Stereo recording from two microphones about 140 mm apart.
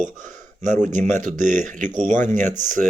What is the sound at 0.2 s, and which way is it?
Speech, 65° right (ahead or behind).